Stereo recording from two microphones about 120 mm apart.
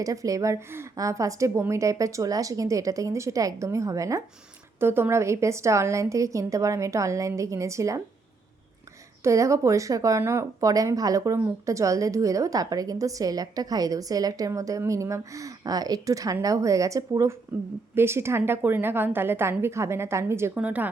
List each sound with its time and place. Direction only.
0.0 s speech: 30° right (ahead or behind)
9.2 s a woman's voice: 25° right (ahead or behind)